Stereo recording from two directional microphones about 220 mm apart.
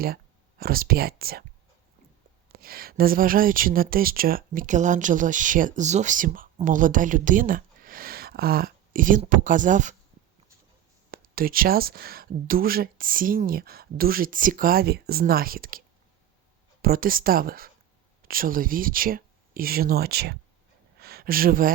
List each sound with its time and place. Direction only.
0.6 s speech: 40° right (ahead or behind)
2.5 s speech: 45° right (ahead or behind)
11.1 s speech: 40° right (ahead or behind)
16.8 s speech: 40° right (ahead or behind)
21.0 s a sound: 45° right (ahead or behind)